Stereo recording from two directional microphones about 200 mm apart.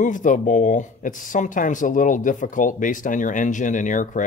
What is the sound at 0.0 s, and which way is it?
Speech, 40° left (ahead or behind).